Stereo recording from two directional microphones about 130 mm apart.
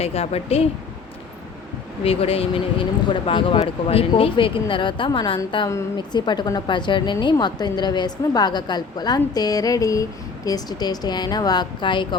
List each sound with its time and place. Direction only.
0.0 s speech: 50° left (ahead or behind)
2.0 s a woman's voice: 45° left (ahead or behind)